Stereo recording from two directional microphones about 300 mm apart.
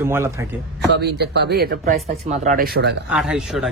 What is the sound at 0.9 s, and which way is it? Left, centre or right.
Speech, right.